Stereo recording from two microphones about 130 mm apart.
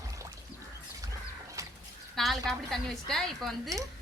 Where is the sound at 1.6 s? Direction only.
25° right (ahead or behind).